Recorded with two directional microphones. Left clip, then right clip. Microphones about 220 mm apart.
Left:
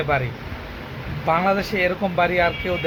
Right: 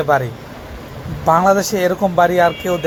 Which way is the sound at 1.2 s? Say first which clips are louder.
Right 7 dB; 5° right (ahead or behind).